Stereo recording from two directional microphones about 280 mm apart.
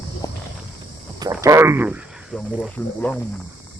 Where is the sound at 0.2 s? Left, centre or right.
Centre.